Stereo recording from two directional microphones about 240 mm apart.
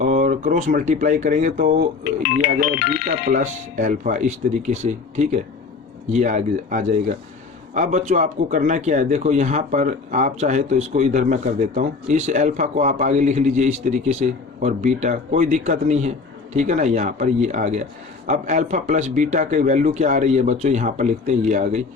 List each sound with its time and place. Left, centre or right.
0.0 s speech: right
3.3 s speech: right